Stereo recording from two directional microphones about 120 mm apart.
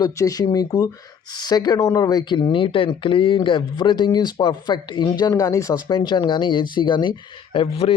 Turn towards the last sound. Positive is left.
turn(degrees=50)  # may be behind; listen again after turning